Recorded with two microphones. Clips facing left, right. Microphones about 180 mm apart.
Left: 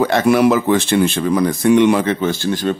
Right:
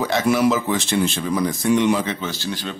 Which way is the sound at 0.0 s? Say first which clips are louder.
Left 5 dB; 60° left (ahead or behind).